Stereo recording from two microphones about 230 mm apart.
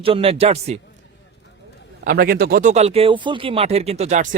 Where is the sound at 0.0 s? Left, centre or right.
Right.